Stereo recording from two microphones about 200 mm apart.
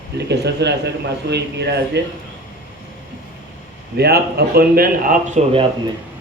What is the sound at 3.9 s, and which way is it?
Speech, 55° right (ahead or behind).